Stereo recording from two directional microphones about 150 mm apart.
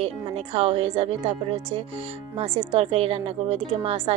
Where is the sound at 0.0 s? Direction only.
40° right (ahead or behind).